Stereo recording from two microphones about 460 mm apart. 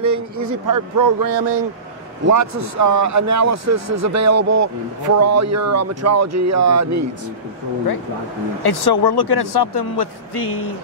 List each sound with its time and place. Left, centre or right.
0.0 s a man's voice: right
8.6 s speech: left